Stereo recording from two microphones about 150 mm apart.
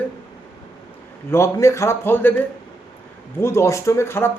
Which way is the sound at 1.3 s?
20° left (ahead or behind).